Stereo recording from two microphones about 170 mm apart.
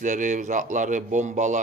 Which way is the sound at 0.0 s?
50° right (ahead or behind).